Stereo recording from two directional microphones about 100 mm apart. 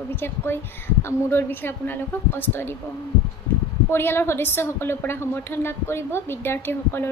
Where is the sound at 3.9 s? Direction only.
25° left (ahead or behind).